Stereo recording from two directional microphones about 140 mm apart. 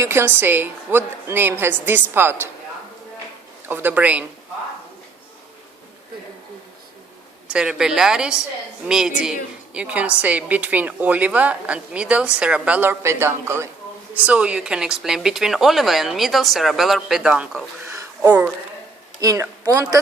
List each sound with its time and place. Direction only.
0.0 s a woman's voice: 20° right (ahead or behind)
3.7 s a woman's voice: 15° right (ahead or behind)
7.5 s a woman's voice: 5° right (ahead or behind)
18.2 s a sound: 10° right (ahead or behind)
19.2 s a woman's voice: 25° right (ahead or behind)